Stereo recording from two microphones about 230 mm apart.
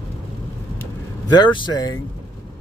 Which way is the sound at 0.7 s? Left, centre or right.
Centre.